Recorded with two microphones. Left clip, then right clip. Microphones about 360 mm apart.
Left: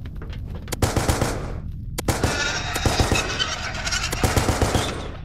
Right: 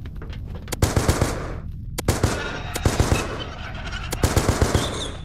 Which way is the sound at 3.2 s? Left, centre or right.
Left.